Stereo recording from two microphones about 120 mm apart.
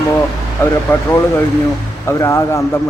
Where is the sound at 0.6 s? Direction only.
15° left (ahead or behind).